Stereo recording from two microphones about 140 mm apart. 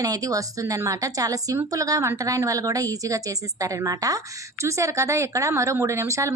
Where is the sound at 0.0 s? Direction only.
25° right (ahead or behind).